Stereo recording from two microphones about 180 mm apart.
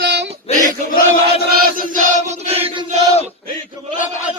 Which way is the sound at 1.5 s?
55° right (ahead or behind).